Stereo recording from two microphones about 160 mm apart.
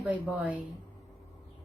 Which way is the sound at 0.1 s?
10° right (ahead or behind).